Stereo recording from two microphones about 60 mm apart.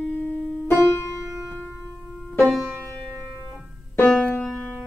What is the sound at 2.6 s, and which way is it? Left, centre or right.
Music, right.